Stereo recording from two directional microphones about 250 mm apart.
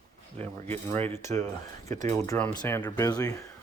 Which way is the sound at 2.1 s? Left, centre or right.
Centre.